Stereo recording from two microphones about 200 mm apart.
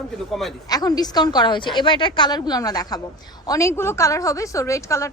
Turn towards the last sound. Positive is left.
turn(degrees=15)  # may be behind; listen again after turning